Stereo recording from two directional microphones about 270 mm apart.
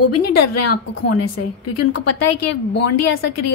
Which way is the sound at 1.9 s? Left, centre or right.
Left.